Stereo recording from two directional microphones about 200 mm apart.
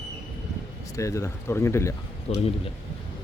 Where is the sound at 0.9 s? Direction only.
15° left (ahead or behind).